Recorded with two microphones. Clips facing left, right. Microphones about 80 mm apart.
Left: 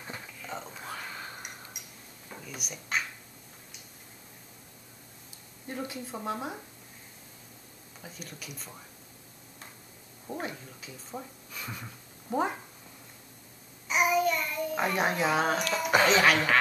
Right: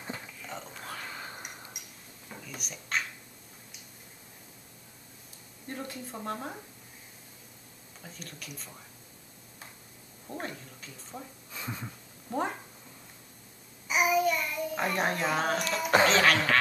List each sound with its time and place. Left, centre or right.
0.1 s whispering: centre
1.8 s a sound: centre
5.7 s speech: centre
8.0 s speech: centre
10.4 s speech: centre
11.5 s a sound: right
12.3 s speech: centre
13.8 s child singing: centre
15.7 s speech: centre